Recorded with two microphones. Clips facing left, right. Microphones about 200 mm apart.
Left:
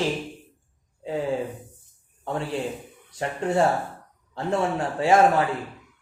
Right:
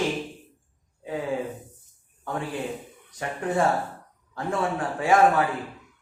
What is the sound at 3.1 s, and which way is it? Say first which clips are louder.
Speech: left 3 dB; 25° left (ahead or behind).